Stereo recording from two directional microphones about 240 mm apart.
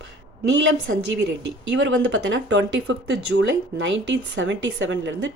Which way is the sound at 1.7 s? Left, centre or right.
Right.